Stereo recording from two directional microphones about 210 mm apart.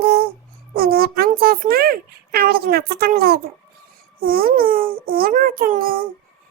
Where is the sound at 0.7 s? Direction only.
45° right (ahead or behind).